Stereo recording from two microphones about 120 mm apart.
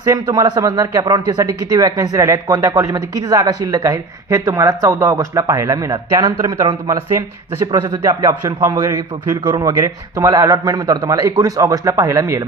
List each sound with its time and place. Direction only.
0.0 s a man's voice: 30° right (ahead or behind)
9.7 s speech: 25° right (ahead or behind)